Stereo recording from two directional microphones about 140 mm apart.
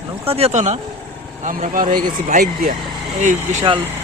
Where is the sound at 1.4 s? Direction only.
70° right (ahead or behind).